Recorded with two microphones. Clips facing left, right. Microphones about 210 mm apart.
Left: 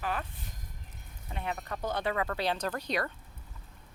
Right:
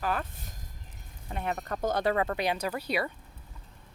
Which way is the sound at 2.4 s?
10° right (ahead or behind).